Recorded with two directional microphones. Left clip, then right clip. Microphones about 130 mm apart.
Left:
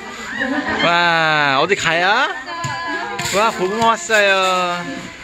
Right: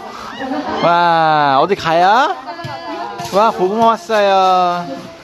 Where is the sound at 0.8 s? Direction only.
25° right (ahead or behind).